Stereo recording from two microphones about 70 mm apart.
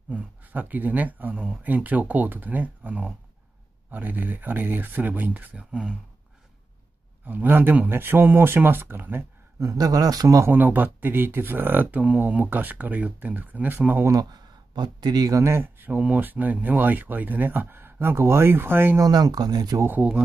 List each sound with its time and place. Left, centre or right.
0.1 s speech: right
7.2 s speech: right
9.6 s speech: right
10.5 s speech: right
14.3 s speech: right
15.3 s speech: right
18.9 s speech: right